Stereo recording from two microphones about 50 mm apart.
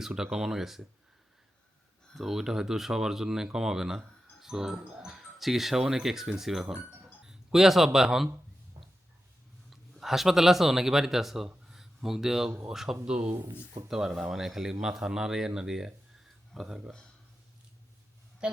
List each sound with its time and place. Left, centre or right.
0.0 s speech: centre
2.1 s speech: centre
4.8 s speech: right
5.0 s speech: centre
9.6 s speech: centre
18.4 s a sound: centre